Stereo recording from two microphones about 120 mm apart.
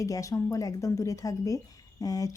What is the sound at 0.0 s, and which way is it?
Speech, 30° left (ahead or behind).